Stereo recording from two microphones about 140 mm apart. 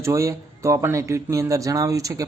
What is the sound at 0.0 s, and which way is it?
Speech, 20° right (ahead or behind).